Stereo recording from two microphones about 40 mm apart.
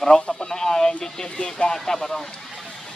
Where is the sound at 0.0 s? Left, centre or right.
Centre.